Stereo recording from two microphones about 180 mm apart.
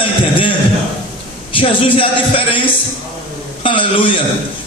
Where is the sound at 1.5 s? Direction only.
30° left (ahead or behind).